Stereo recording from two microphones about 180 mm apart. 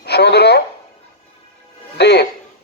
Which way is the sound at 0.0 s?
65° left (ahead or behind).